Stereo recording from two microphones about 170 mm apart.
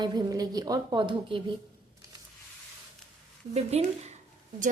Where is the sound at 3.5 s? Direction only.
40° right (ahead or behind).